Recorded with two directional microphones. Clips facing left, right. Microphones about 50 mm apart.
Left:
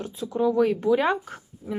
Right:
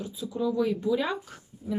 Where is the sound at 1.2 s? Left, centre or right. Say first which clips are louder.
Left 1 dB; left.